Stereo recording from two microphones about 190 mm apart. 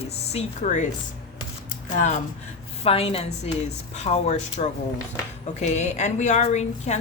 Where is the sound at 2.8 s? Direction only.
30° left (ahead or behind).